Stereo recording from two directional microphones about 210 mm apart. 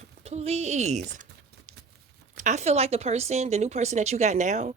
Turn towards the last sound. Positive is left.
turn(degrees=-35)  # may be behind; listen again after turning